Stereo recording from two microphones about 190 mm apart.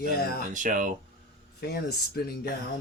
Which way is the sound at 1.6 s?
55° left (ahead or behind).